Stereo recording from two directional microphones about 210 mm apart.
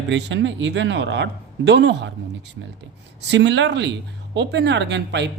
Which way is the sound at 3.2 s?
55° right (ahead or behind).